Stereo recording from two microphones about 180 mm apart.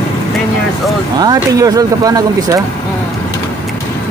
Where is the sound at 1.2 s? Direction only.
20° right (ahead or behind).